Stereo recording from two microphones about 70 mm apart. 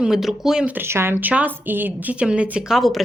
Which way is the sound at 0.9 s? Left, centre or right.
Right.